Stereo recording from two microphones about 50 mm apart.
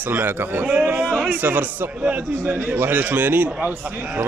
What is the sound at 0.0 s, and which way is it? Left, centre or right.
Speech, right.